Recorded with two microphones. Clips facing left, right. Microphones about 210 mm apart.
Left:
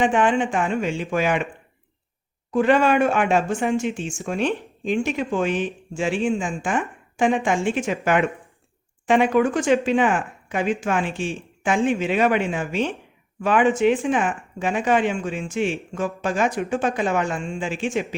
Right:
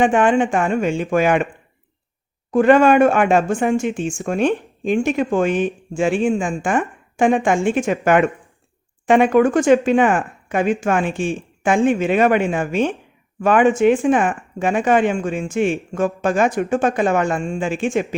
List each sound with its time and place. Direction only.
0.0 s speech: 50° right (ahead or behind)
2.5 s speech: 50° right (ahead or behind)